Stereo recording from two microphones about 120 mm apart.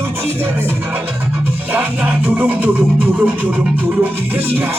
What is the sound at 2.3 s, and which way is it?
Music, 15° right (ahead or behind).